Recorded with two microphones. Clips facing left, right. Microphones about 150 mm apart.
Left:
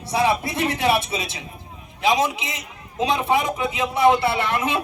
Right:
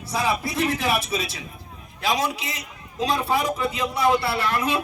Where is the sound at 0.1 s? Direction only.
25° left (ahead or behind).